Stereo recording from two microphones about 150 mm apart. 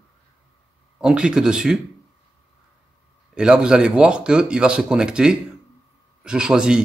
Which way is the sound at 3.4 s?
5° right (ahead or behind).